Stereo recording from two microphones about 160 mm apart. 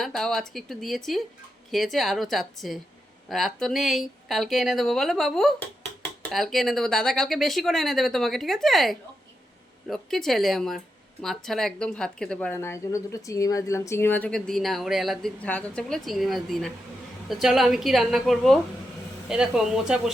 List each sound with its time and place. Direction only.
0.0 s a woman's voice: centre (ahead or behind)